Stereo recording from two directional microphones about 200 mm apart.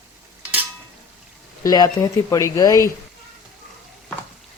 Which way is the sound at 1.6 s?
20° left (ahead or behind).